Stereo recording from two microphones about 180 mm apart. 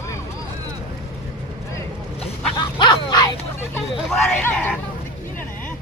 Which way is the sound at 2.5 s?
25° left (ahead or behind).